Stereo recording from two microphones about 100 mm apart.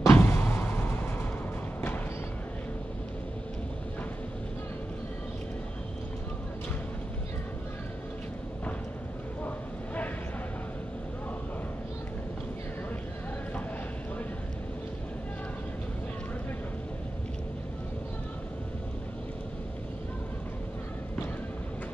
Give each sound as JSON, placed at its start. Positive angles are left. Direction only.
{"t": 0.0, "sound": "vehicle", "side_deg": 25}